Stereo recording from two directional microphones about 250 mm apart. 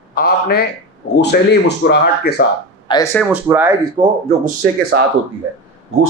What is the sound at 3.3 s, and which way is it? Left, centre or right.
Speech, centre.